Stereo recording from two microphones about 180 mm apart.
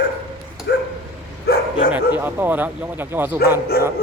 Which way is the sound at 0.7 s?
70° left (ahead or behind).